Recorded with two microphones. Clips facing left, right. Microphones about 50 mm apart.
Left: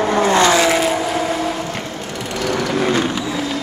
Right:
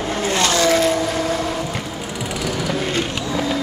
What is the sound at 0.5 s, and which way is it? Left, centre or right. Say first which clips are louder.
Vehicle: left 1 dB; centre.